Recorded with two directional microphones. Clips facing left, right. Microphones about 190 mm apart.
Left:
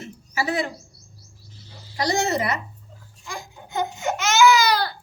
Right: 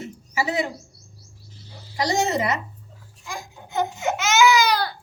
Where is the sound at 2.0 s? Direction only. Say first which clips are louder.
Even; 20° right (ahead or behind).